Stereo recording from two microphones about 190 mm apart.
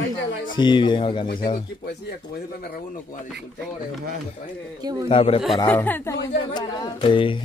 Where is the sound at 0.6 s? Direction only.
25° left (ahead or behind).